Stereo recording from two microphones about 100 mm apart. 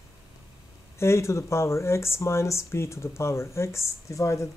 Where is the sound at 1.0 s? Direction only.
30° left (ahead or behind).